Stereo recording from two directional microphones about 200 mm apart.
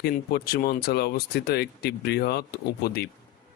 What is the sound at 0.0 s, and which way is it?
Speech, 50° left (ahead or behind).